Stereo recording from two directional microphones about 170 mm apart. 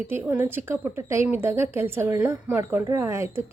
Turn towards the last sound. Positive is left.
turn(degrees=-15)  # may be behind; listen again after turning